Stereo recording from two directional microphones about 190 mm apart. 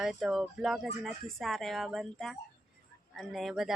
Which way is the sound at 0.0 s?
Centre (ahead or behind).